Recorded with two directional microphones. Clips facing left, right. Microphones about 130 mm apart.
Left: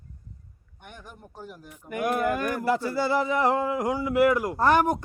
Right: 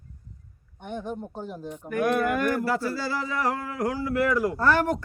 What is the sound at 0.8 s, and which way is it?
Speech, 25° right (ahead or behind).